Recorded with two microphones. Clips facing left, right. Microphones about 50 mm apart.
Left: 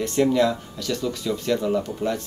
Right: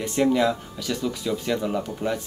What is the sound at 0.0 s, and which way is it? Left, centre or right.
Speech, centre.